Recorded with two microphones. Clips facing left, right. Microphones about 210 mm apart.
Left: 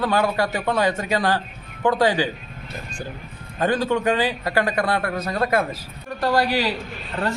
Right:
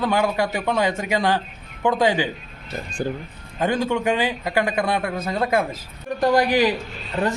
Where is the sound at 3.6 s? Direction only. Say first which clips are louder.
Left 1 dB; 15° right (ahead or behind).